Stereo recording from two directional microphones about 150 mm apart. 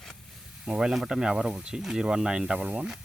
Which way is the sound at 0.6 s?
5° right (ahead or behind).